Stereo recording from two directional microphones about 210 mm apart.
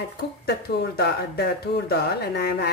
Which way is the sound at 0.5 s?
50° left (ahead or behind).